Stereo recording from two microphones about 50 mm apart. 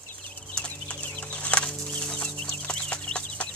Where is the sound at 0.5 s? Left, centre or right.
Left.